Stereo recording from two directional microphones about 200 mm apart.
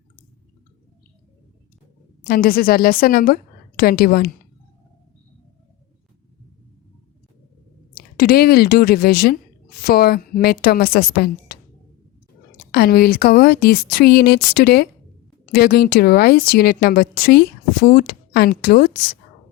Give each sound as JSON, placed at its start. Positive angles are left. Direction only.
{"t": 2.3, "sound": "speech", "side_deg": 45}
{"t": 7.9, "sound": "speech", "side_deg": 45}
{"t": 12.7, "sound": "speech", "side_deg": 50}